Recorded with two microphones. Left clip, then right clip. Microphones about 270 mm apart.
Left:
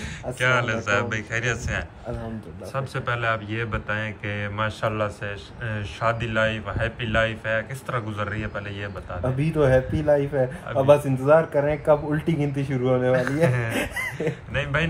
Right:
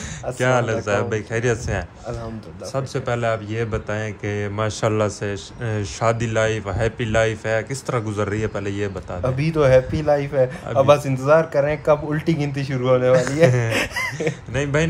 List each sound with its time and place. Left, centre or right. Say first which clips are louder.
0.4 s speech: right 2 dB; centre
9.2 s a man's voice: right 4 dB; centre
13.1 s speech: right 6 dB; right
13.7 s a man's voice: right 5 dB; centre